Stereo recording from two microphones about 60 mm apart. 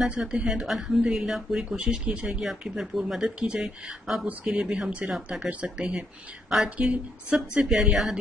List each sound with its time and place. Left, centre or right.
0.2 s speech: centre
2.2 s speech: centre
5.1 s speech: centre
5.5 s speech: right
7.6 s speech: centre